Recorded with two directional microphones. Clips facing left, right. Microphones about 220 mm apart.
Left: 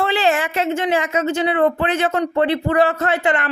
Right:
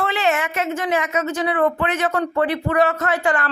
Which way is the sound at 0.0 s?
30° left (ahead or behind).